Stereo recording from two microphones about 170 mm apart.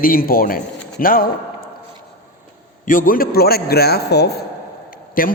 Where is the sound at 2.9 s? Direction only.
55° left (ahead or behind); by 4.3 s 75° left (ahead or behind).